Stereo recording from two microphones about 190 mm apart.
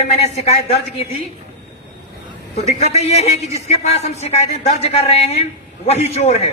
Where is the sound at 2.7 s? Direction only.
35° left (ahead or behind).